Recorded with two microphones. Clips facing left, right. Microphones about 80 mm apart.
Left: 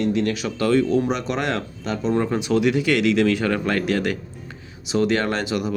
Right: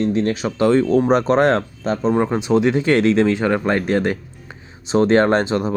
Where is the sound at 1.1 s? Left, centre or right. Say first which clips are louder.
Right 9 dB; right.